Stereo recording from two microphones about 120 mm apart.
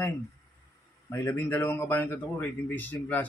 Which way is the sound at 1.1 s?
20° left (ahead or behind).